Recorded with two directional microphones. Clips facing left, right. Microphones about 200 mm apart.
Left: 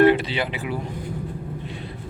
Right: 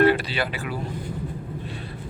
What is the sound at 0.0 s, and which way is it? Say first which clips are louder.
Vehicle: left 3 dB; 20° left (ahead or behind).